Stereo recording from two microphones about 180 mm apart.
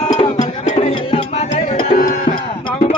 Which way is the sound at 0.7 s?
35° left (ahead or behind).